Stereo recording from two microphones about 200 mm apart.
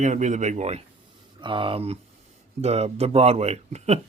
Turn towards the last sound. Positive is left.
turn(degrees=-35)  # may be behind; listen again after turning